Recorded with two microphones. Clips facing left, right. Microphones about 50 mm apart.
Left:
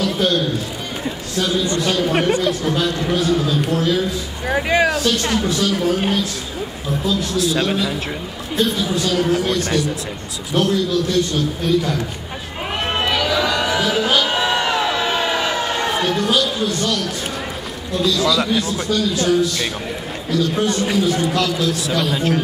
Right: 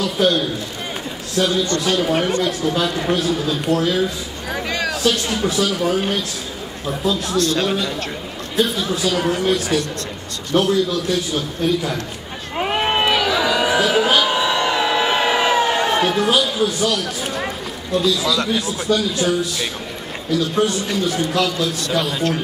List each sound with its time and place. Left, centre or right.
0.0 s a man's voice: centre
1.8 s a man's voice: centre
2.1 s speech: centre
2.4 s a man's voice: centre
4.5 s a sound: left
4.9 s a man's voice: centre
7.1 s a man's voice: centre
7.3 s a man's voice: centre
12.5 s a sound: centre
14.3 s music: centre
14.7 s a sound: centre
15.0 s a sound: centre
17.9 s a man's voice: centre